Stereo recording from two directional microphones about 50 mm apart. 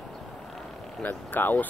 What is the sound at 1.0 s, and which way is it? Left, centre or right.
Speech, left.